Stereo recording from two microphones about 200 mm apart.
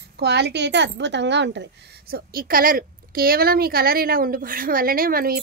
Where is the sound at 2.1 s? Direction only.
45° right (ahead or behind).